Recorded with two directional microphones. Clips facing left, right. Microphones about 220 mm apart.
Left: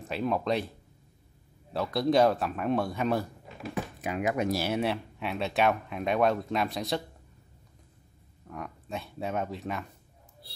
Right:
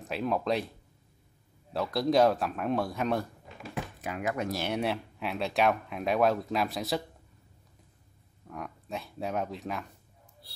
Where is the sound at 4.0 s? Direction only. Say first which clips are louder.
Left 3 dB; 20° left (ahead or behind).